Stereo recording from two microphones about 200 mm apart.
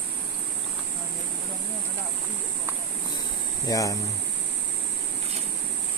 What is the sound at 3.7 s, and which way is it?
Speech, 15° left (ahead or behind).